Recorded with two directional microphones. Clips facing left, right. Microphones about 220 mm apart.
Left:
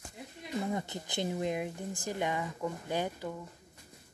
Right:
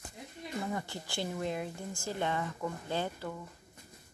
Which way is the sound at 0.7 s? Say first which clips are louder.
Left 2 dB; 20° left (ahead or behind).